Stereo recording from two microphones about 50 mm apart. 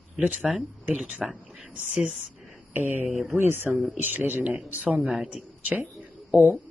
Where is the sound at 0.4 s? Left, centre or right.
Centre.